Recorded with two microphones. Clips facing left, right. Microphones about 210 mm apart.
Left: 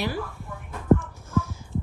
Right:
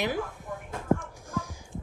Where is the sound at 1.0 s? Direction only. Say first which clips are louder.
Left 7 dB; 15° right (ahead or behind).